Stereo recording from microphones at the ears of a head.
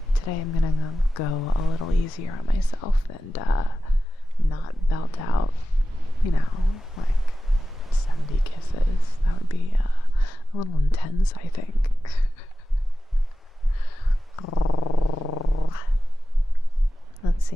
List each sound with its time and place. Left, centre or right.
0.1 s speech: left
12.0 s beatboxing: left
13.7 s purr: left